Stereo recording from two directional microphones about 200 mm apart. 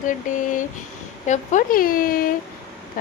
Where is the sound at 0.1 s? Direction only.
40° left (ahead or behind).